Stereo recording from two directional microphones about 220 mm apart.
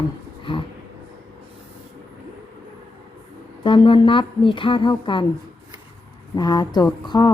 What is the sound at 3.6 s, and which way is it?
A woman's voice, 20° left (ahead or behind).